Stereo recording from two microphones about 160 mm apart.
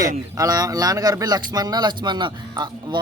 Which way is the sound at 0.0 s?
20° right (ahead or behind).